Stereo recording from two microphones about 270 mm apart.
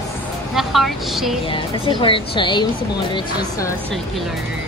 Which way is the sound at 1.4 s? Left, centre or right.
Centre.